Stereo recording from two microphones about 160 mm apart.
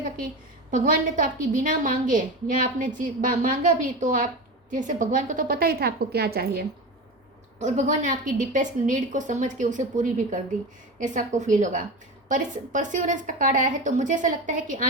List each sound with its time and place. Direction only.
0.7 s a woman's voice: 55° right (ahead or behind); by 6.7 s 75° right (ahead or behind)
7.6 s a woman's voice: 50° right (ahead or behind)